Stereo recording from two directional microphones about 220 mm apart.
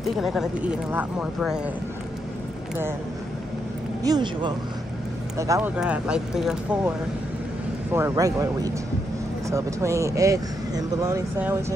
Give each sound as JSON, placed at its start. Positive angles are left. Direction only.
{"t": 0.1, "sound": "speech", "side_deg": 0}
{"t": 4.0, "sound": "speech", "side_deg": -20}
{"t": 5.8, "sound": "speech", "side_deg": -5}
{"t": 7.9, "sound": "speech", "side_deg": -15}